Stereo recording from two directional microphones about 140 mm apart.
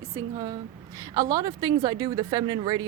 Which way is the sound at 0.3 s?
30° right (ahead or behind).